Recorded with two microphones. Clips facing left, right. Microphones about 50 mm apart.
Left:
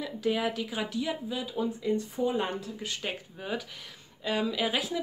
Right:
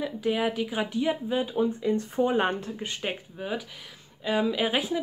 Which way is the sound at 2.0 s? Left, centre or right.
Right.